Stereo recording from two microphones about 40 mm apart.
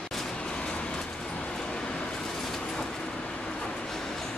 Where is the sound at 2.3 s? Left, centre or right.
Centre.